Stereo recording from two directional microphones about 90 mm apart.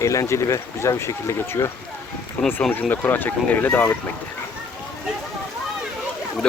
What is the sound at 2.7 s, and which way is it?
Speech, 20° left (ahead or behind).